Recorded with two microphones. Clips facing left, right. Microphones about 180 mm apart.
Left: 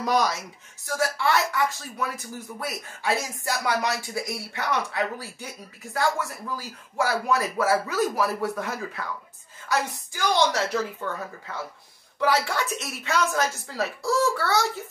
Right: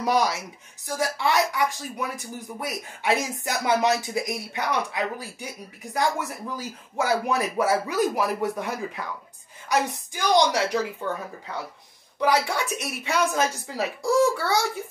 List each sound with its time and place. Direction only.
0.0 s speech: 15° right (ahead or behind)
12.2 s speech: 15° right (ahead or behind)